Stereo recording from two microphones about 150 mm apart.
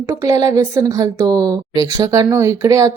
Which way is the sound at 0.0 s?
20° right (ahead or behind).